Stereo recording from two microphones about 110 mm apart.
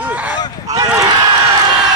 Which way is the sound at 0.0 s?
15° right (ahead or behind).